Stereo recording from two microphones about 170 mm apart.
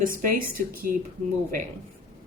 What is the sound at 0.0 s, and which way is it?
Speech, 55° right (ahead or behind).